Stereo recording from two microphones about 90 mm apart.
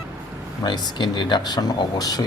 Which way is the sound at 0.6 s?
55° left (ahead or behind).